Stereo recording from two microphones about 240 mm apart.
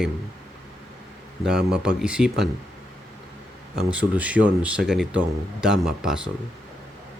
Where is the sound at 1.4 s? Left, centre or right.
Centre.